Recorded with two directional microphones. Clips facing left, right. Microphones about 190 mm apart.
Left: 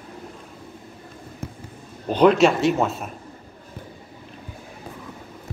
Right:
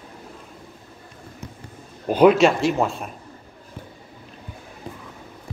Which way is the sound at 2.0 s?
5° right (ahead or behind).